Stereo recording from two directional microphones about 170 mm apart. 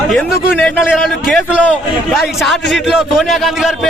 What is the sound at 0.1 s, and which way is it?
A man's voice, centre (ahead or behind).